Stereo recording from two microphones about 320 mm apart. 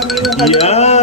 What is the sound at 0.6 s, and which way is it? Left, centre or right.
Speech, centre.